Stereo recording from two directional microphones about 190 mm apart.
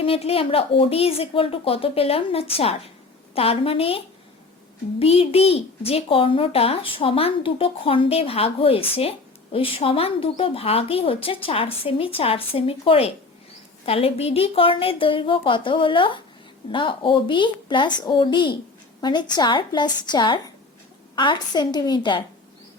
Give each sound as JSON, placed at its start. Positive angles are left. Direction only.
{"t": 0.0, "sound": "a child's voice", "side_deg": 30}